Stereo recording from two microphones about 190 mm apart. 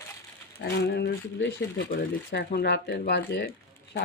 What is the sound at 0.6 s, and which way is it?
Speech, 60° left (ahead or behind).